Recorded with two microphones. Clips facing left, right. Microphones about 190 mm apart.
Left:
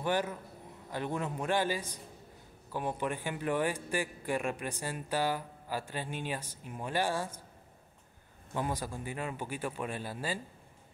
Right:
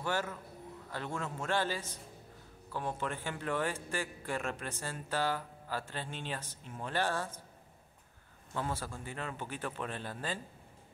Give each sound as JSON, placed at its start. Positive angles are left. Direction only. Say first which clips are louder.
{"t": 0.0, "sound": "a man's voice", "louder": "left 4 dB", "side_deg": 15}
{"t": 8.5, "sound": "a man's voice", "louder": "left 3 dB", "side_deg": 15}